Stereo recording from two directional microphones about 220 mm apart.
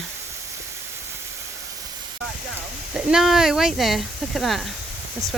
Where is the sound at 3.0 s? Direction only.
5° right (ahead or behind).